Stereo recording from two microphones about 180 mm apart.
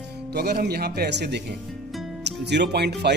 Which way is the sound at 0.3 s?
65° right (ahead or behind).